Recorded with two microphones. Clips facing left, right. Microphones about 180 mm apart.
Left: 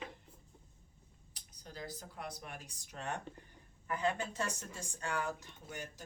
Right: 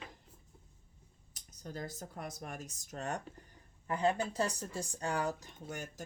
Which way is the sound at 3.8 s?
30° right (ahead or behind).